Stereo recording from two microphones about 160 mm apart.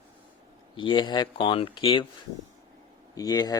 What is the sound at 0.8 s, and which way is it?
Speech, 30° left (ahead or behind).